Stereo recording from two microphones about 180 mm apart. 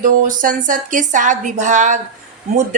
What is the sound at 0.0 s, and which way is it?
A woman's voice, 45° right (ahead or behind).